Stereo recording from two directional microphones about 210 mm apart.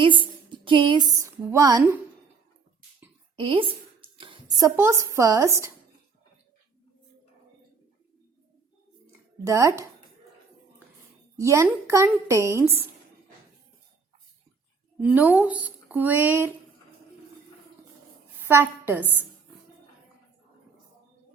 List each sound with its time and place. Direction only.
0.0 s a sound: 25° right (ahead or behind)
3.3 s a woman's voice: 25° right (ahead or behind)
9.4 s a woman's voice: 15° right (ahead or behind)
11.3 s a woman's voice: 15° right (ahead or behind)
15.0 s a woman's voice: 10° right (ahead or behind)
18.3 s a woman's voice: 10° right (ahead or behind)